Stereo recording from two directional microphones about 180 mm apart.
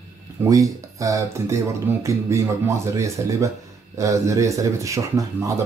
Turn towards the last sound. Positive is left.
turn(degrees=-15)  # may be behind; listen again after turning